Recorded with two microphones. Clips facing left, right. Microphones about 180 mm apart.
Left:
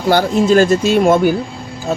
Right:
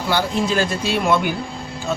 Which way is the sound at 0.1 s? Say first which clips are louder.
Left 9 dB; 45° left (ahead or behind).